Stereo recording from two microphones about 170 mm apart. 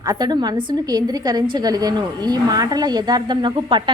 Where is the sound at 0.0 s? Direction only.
20° right (ahead or behind).